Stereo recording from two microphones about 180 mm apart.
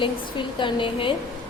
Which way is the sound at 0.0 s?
25° left (ahead or behind).